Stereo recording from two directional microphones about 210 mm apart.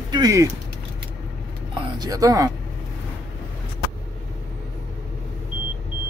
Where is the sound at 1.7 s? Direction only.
20° right (ahead or behind).